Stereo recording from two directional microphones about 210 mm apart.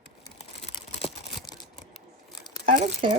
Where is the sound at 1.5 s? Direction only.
20° left (ahead or behind).